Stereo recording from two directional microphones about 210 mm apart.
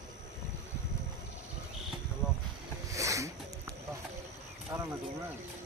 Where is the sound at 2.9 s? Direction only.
15° right (ahead or behind).